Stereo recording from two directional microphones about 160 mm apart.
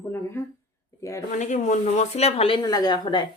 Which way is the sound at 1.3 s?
50° left (ahead or behind).